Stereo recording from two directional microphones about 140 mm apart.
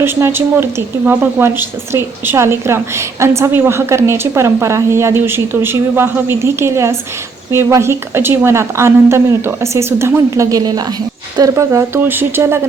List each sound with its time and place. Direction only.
0.0 s a woman's voice: 15° right (ahead or behind)